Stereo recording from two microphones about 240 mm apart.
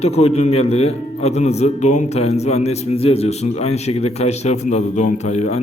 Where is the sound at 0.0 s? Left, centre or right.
Left.